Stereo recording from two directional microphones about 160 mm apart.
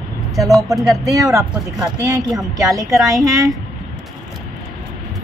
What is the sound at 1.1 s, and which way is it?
A woman's voice, 20° right (ahead or behind).